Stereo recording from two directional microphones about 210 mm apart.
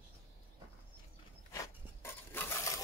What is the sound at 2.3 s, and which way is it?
Stir, 10° left (ahead or behind).